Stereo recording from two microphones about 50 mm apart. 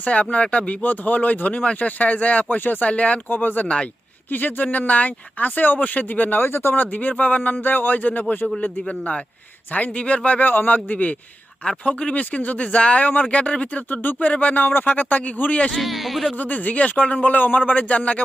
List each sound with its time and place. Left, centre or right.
0.0 s speech: left
6.4 s speech: left
6.9 s speech: left
15.8 s speech: centre
16.4 s speech: left